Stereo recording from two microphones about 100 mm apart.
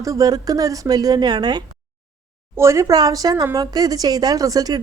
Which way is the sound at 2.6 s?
30° right (ahead or behind).